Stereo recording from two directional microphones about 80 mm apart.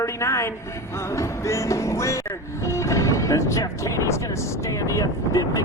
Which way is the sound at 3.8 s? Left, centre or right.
Left.